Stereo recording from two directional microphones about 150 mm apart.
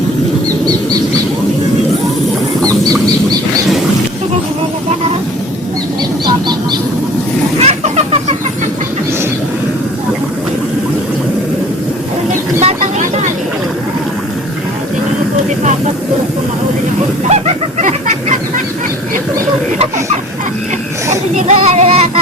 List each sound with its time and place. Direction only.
2.6 s bird: 25° right (ahead or behind)
6.2 s honk: 30° right (ahead or behind)
7.6 s chicken: 45° right (ahead or behind)
12.3 s vehicle: 50° right (ahead or behind)
17.2 s fowl: 45° right (ahead or behind)
21.3 s child singing: 50° right (ahead or behind)